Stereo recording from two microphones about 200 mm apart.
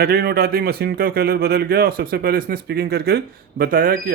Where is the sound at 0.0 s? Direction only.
50° right (ahead or behind).